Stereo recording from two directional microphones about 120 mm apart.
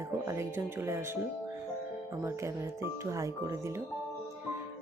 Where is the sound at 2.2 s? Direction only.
25° right (ahead or behind).